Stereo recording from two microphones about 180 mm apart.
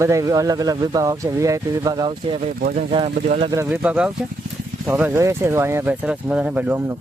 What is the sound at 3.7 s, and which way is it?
Speech, 10° right (ahead or behind).